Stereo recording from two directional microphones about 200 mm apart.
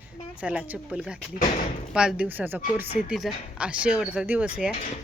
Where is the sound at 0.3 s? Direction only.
5° right (ahead or behind).